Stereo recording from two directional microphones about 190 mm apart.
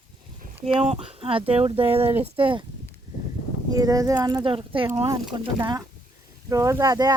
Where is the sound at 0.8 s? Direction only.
30° right (ahead or behind).